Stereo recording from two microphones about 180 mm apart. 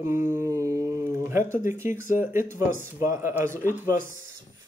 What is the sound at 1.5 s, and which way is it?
Speech, 15° right (ahead or behind).